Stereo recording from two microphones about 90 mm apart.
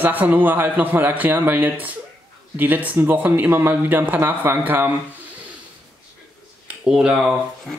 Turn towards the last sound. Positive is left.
turn(degrees=-10)  # may be behind; listen again after turning